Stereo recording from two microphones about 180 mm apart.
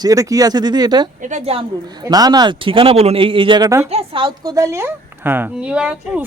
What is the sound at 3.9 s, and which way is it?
A woman's voice, 30° right (ahead or behind).